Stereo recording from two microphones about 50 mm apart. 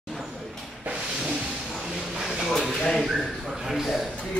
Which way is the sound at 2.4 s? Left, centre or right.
Centre.